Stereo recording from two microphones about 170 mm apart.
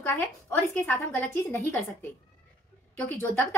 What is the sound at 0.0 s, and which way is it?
A woman's voice, 15° left (ahead or behind).